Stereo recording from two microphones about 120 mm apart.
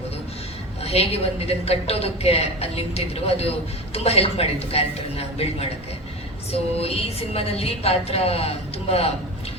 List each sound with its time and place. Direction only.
0.8 s a woman's voice: 55° left (ahead or behind)